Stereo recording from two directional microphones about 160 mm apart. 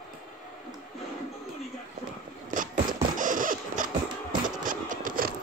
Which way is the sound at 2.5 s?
55° right (ahead or behind).